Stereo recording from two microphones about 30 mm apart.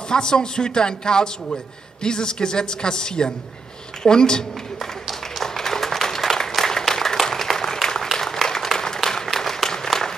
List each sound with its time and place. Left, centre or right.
0.1 s speech: left
5.4 s applause: centre